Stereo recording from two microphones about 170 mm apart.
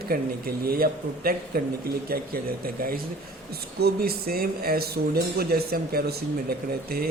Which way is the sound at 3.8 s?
65° right (ahead or behind).